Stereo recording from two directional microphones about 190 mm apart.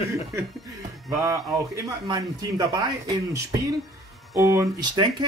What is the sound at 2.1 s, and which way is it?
Speech, 20° right (ahead or behind).